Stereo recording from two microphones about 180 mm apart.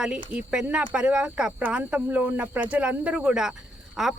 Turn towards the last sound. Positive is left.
turn(degrees=0)  # may be behind; listen again after turning